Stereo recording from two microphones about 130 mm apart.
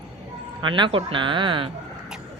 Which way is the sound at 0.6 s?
40° right (ahead or behind).